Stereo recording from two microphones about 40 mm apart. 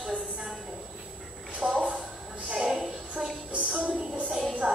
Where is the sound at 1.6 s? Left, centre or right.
Centre.